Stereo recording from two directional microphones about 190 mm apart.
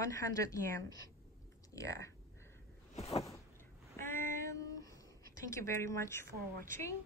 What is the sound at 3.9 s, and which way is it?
Child singing, 15° left (ahead or behind).